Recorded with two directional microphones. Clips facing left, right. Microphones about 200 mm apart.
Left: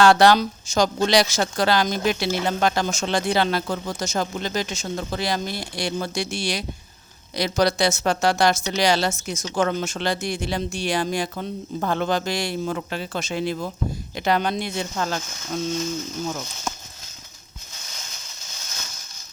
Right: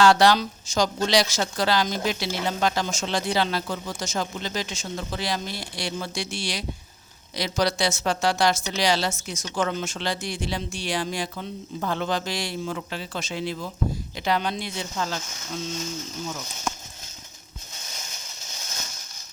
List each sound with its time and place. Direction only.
0.0 s speech: 55° left (ahead or behind)